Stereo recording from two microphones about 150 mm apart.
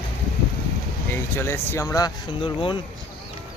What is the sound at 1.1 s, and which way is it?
Speech, 15° left (ahead or behind).